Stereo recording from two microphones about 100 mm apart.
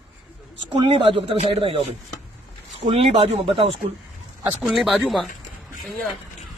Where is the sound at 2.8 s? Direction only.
90° right; by 3.7 s 65° right (ahead or behind).